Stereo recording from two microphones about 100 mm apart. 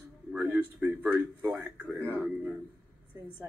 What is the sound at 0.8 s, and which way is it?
Speech, 15° right (ahead or behind).